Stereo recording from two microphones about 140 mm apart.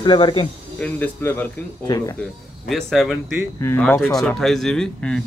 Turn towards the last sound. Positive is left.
turn(degrees=5)  # may be behind; listen again after turning